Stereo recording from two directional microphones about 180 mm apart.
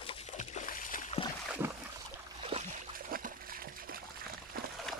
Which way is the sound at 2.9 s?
50° right (ahead or behind).